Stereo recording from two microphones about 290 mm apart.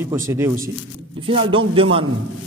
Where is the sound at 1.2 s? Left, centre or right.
Centre.